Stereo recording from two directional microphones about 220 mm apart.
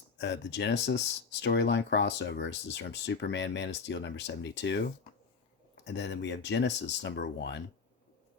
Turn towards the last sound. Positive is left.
turn(degrees=50)  # may be behind; listen again after turning